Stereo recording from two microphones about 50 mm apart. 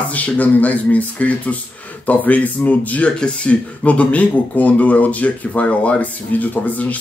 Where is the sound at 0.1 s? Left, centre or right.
Left.